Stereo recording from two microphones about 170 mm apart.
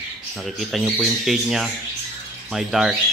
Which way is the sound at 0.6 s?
Centre (ahead or behind).